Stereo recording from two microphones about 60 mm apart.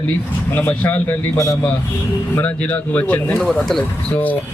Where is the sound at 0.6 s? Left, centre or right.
Left.